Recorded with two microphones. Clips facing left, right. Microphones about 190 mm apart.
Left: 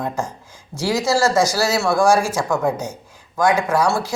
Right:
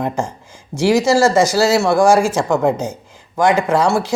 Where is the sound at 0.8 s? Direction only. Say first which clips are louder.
Right 6 dB; 20° right (ahead or behind).